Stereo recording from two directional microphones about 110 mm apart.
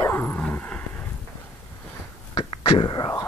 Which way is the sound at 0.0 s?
20° left (ahead or behind).